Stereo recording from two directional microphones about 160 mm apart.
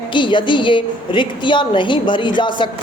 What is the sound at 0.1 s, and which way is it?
A woman's voice, 30° left (ahead or behind).